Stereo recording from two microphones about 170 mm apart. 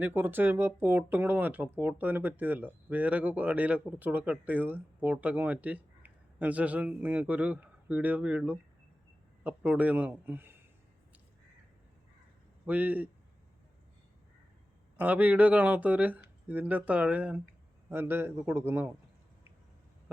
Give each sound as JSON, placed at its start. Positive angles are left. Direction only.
{"t": 0.0, "sound": "speech", "side_deg": -10}
{"t": 12.6, "sound": "speech", "side_deg": -10}
{"t": 14.9, "sound": "speech", "side_deg": -10}